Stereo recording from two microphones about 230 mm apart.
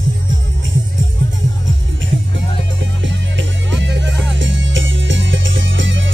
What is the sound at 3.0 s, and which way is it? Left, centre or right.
Music, right.